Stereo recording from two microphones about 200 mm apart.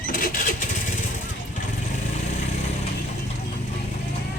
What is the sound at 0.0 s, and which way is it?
Vehicle, 45° left (ahead or behind).